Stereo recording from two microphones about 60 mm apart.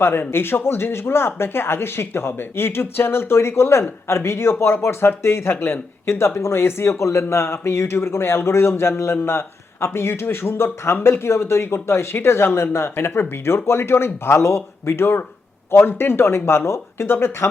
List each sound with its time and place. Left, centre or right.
0.0 s a man's voice: left